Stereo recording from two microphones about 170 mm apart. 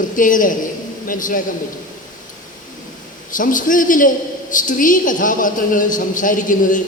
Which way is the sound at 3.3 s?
50° left (ahead or behind).